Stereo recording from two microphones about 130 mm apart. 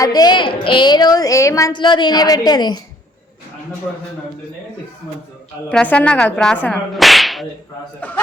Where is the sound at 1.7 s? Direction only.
35° left (ahead or behind).